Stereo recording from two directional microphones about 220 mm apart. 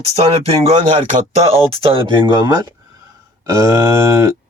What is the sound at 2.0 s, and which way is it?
Speech, 20° right (ahead or behind).